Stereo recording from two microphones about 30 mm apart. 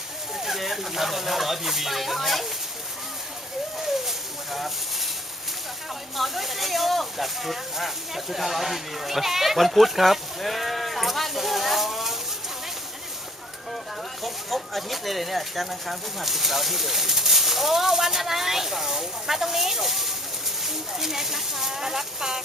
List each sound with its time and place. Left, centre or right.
0.3 s speech: centre
4.5 s speech: centre
6.1 s speech: centre
10.4 s sheep: centre
14.2 s speech: centre